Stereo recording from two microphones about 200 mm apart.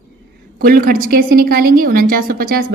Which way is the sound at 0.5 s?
45° right (ahead or behind).